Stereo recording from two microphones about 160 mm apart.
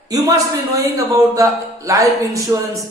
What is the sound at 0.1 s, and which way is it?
A man's voice, 20° right (ahead or behind).